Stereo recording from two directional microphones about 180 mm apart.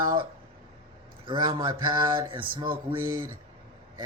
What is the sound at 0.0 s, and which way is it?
Speech, 25° right (ahead or behind).